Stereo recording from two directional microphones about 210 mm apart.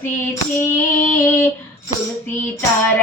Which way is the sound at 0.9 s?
10° left (ahead or behind).